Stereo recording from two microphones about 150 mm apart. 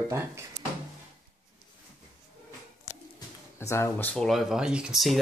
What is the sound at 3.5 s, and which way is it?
Speech, 15° left (ahead or behind).